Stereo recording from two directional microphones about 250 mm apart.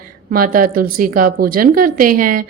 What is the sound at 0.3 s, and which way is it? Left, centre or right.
A woman's voice, right.